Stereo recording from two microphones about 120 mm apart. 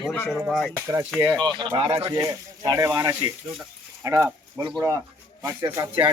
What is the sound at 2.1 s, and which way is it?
Speech, 25° right (ahead or behind).